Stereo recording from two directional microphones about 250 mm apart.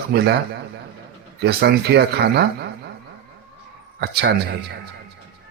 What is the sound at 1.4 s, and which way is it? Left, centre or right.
A man's voice, right.